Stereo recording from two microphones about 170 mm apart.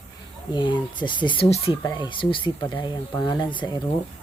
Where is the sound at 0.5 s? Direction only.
30° left (ahead or behind).